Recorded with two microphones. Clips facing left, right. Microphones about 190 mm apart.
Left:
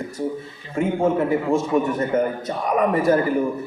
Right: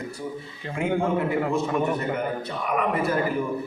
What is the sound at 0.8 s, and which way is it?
A man's voice, 45° left (ahead or behind).